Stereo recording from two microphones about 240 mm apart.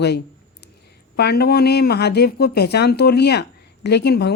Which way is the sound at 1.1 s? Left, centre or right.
Left.